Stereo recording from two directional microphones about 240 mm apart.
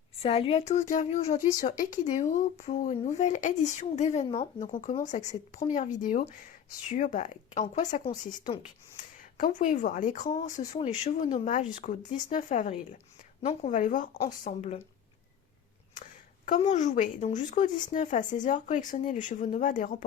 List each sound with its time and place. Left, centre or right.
0.2 s speech: left
9.4 s speech: left
16.5 s speech: left